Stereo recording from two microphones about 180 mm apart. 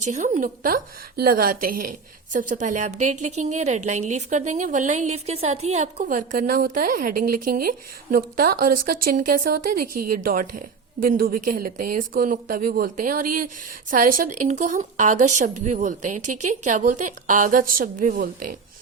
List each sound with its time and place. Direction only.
0.0 s a woman's voice: 45° right (ahead or behind)